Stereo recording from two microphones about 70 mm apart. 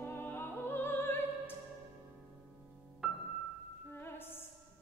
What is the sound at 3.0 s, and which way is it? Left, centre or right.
Music, centre.